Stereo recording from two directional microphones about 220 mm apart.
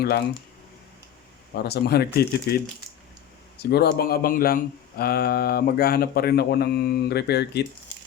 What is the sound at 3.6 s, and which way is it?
Speech, 45° left (ahead or behind).